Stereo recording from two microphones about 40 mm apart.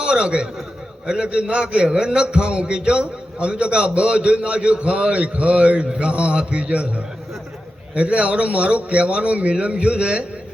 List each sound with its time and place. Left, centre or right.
0.0 s a man's voice: right